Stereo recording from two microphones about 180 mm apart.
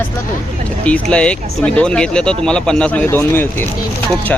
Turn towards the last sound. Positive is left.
turn(degrees=10)  # may be behind; listen again after turning